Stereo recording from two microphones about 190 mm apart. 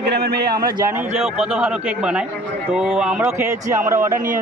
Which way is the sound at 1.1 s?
30° right (ahead or behind).